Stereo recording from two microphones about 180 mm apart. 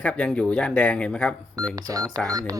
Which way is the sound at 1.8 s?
20° right (ahead or behind).